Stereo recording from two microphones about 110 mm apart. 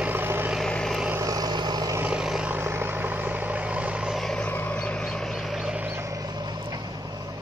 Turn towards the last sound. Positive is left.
turn(degrees=-40)  # may be behind; listen again after turning